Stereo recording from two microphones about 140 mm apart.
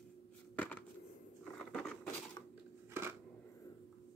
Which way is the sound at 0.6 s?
10° left (ahead or behind).